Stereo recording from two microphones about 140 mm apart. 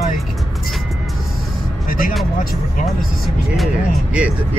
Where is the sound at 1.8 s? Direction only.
90° left.